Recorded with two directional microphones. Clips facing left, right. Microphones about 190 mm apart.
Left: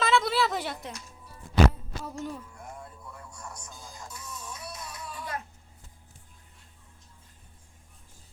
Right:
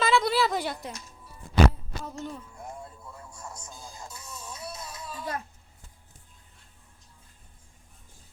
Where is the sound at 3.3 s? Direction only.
25° right (ahead or behind).